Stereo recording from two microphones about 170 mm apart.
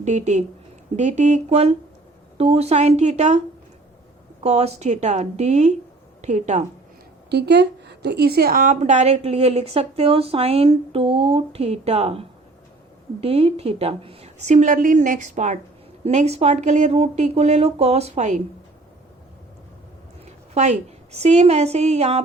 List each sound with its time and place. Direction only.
0.0 s a woman's voice: 45° right (ahead or behind)
4.4 s a woman's voice: 40° right (ahead or behind)
7.3 s a woman's voice: 75° right (ahead or behind); by 12.2 s 35° right (ahead or behind)
13.2 s a woman's voice: 35° right (ahead or behind)
20.2 s a woman's voice: 40° right (ahead or behind)